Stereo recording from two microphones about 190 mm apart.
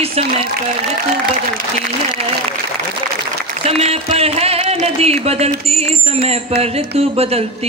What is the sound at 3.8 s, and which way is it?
Music, 30° right (ahead or behind).